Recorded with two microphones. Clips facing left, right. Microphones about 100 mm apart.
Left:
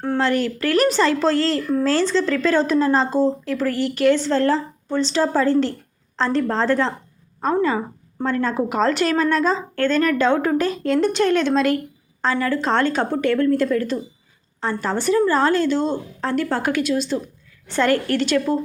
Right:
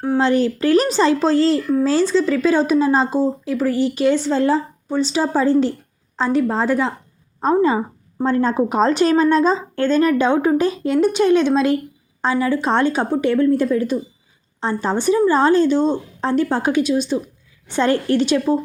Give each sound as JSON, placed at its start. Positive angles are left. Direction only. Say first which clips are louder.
{"t": 0.2, "sound": "a woman's voice", "louder": "right 4 dB", "side_deg": -20}